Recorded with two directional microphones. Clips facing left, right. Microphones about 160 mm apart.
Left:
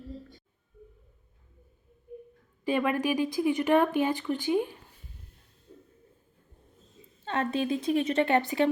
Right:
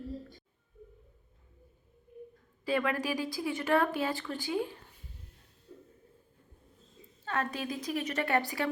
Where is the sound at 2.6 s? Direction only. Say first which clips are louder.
Left 4 dB; 20° left (ahead or behind).